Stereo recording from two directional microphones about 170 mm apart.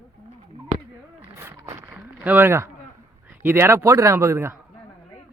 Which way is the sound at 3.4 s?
15° right (ahead or behind).